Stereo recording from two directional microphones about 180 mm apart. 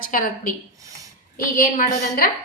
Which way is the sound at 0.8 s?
20° right (ahead or behind).